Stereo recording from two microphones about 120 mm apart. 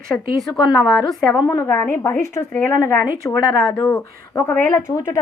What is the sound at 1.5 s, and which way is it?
A woman's voice, 20° left (ahead or behind).